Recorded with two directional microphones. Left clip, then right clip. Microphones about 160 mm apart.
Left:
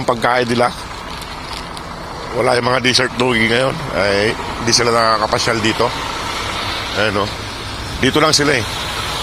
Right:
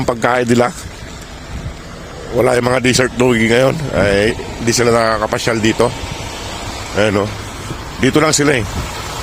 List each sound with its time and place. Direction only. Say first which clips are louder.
0.1 s speech: even; 45° right (ahead or behind)
0.3 s speech: right 1 dB; 55° right (ahead or behind)
2.4 s speech: right 1 dB; 75° right (ahead or behind)
6.9 s speech: right 4 dB; 45° right (ahead or behind)
8.4 s speech: right 1 dB; 65° right (ahead or behind)